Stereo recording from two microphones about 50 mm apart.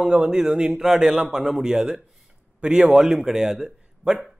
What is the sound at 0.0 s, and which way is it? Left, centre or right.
Speech, centre.